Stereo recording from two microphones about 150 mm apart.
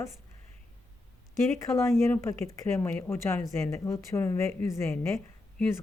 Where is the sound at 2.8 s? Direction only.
15° left (ahead or behind).